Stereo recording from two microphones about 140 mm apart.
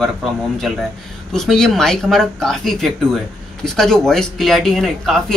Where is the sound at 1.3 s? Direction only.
5° left (ahead or behind).